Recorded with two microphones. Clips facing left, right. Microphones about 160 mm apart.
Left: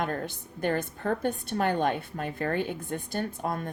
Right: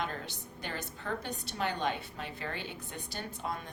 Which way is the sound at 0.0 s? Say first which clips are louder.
Left 7 dB; 50° left (ahead or behind).